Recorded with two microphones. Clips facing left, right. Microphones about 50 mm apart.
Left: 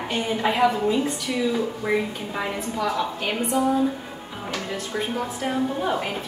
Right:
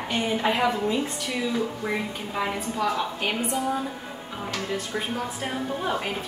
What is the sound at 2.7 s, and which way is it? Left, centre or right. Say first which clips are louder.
A woman's voice: left 3 dB; centre.